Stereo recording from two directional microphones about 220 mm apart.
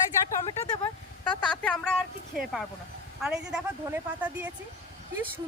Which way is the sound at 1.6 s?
5° left (ahead or behind).